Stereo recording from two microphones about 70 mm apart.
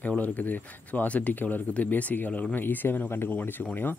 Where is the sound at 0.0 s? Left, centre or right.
Left.